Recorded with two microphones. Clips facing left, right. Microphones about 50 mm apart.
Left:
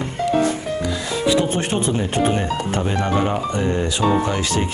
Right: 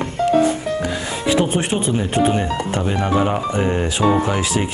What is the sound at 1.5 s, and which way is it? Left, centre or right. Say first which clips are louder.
Speech: right 1 dB; centre.